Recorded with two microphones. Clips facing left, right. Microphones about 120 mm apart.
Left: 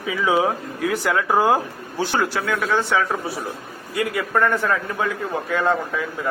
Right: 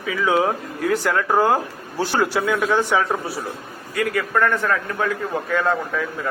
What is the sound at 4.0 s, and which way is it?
A man's voice, 10° left (ahead or behind).